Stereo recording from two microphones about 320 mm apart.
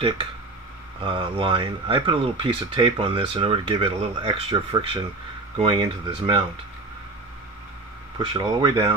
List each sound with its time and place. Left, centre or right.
1.0 s speech: centre
8.2 s speech: centre